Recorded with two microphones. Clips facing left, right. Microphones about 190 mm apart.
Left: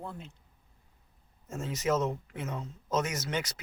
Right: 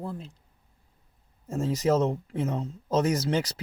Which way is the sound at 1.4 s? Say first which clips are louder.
Right 6 dB; 35° right (ahead or behind).